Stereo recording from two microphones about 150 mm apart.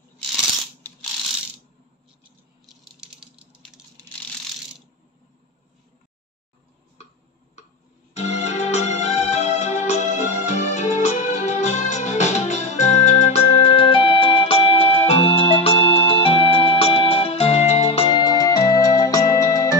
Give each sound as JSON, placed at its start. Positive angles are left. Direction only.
{"t": 8.1, "sound": "music", "side_deg": 45}